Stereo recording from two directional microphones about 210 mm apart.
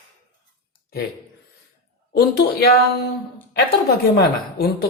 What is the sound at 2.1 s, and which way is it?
Speech, 50° left (ahead or behind).